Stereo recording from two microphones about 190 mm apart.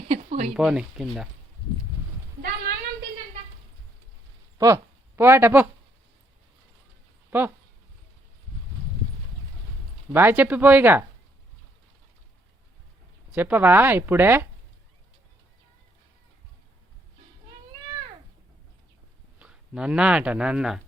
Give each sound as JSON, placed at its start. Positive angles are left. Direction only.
{"t": 0.1, "sound": "a sound", "side_deg": -35}
{"t": 0.5, "sound": "speech", "side_deg": -5}
{"t": 4.5, "sound": "speech", "side_deg": -15}
{"t": 7.3, "sound": "speech", "side_deg": -10}
{"t": 10.1, "sound": "speech", "side_deg": -10}
{"t": 13.3, "sound": "speech", "side_deg": -10}
{"t": 19.4, "sound": "speech", "side_deg": -5}